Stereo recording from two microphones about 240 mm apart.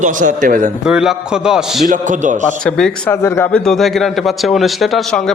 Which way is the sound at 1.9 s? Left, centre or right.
Right.